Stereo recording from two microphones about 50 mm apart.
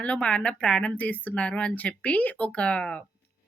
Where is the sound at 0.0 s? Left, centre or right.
Centre.